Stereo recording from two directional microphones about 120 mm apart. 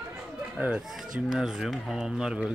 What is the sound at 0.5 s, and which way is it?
Speech, 10° right (ahead or behind).